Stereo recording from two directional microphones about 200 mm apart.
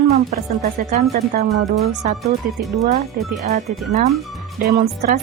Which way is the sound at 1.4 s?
Centre (ahead or behind).